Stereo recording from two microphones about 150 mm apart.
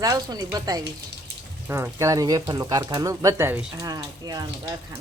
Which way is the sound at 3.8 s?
25° right (ahead or behind).